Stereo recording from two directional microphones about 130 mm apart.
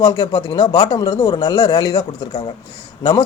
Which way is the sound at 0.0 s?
35° left (ahead or behind).